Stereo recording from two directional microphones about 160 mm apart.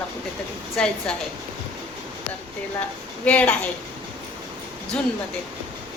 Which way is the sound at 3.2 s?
10° left (ahead or behind).